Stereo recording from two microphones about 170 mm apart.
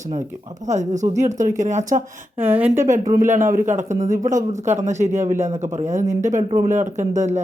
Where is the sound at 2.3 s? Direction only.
10° right (ahead or behind).